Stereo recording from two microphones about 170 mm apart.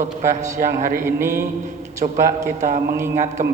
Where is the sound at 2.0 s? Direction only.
50° right (ahead or behind).